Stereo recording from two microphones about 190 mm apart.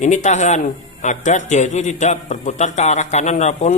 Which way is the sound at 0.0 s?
40° left (ahead or behind).